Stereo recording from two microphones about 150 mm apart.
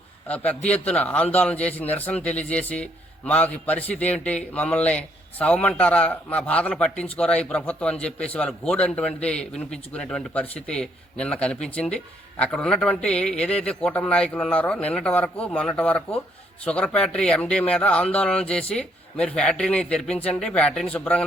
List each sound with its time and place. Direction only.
0.3 s a man's voice: 10° left (ahead or behind)